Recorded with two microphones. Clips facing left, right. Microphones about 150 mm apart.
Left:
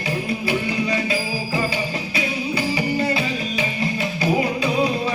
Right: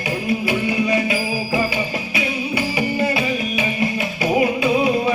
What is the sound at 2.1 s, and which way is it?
Music, 15° right (ahead or behind).